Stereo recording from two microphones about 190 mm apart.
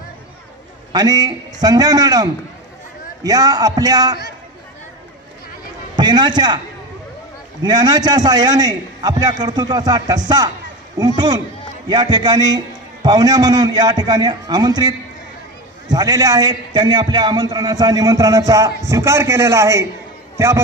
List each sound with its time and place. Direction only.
0.9 s a man's voice: 20° right (ahead or behind)
3.3 s a man's voice: 20° right (ahead or behind)
5.9 s a man's voice: 20° right (ahead or behind)
7.6 s a man's voice: 20° right (ahead or behind)